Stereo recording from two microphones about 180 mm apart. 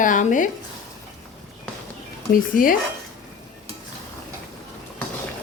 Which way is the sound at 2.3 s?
50° left (ahead or behind).